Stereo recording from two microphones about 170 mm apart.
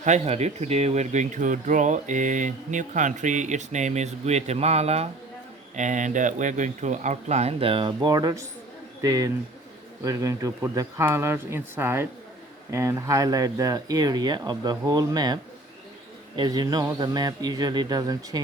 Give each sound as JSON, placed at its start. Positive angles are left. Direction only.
{"t": 0.0, "sound": "speech", "side_deg": -40}